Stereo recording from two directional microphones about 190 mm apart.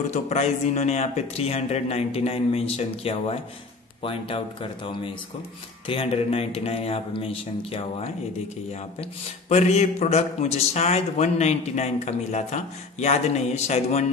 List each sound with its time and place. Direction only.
0.1 s a man's voice: 35° left (ahead or behind)
9.5 s a man's voice: 35° left (ahead or behind)